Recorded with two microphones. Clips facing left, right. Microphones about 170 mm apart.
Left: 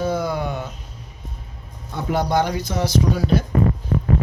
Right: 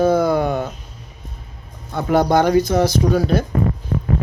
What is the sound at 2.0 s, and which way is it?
Speech, 55° right (ahead or behind).